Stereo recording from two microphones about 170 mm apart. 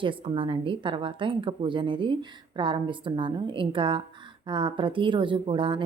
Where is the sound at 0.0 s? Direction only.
30° right (ahead or behind).